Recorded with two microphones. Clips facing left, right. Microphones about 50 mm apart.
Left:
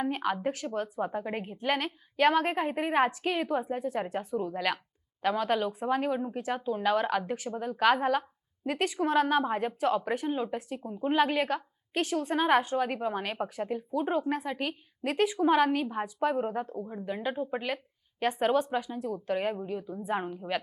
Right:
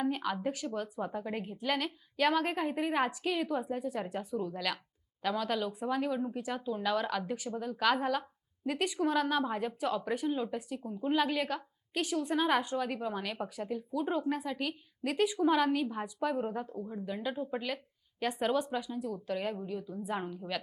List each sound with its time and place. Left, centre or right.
0.0 s a woman's voice: left
0.7 s a woman's voice: centre
9.0 s a woman's voice: left
15.1 s speech: left
15.4 s a woman's voice: centre